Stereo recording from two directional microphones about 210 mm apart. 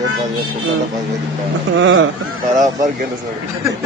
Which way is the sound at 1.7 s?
65° right (ahead or behind).